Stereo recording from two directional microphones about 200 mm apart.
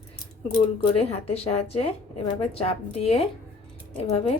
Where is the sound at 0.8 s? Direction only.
30° left (ahead or behind).